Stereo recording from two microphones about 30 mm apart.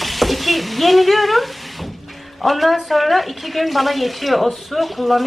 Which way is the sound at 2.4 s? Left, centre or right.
Centre.